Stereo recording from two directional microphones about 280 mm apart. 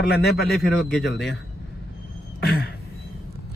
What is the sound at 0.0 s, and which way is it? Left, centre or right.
Speech, left.